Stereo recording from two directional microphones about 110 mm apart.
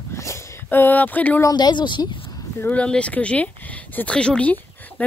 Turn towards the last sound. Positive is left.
turn(degrees=10)  # may be behind; listen again after turning